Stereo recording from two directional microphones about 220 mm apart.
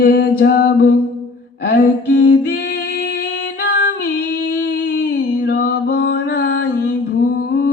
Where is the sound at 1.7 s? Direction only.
50° left (ahead or behind).